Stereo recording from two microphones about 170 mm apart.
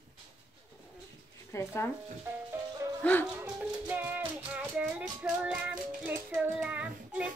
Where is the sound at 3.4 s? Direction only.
10° right (ahead or behind).